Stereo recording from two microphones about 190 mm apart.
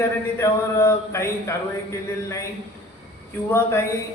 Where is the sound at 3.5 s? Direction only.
15° left (ahead or behind).